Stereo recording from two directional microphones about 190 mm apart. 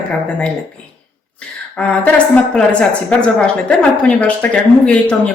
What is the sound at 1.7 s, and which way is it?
Speech, 5° left (ahead or behind).